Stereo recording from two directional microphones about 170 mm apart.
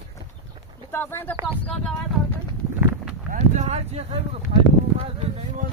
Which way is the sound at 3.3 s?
45° right (ahead or behind).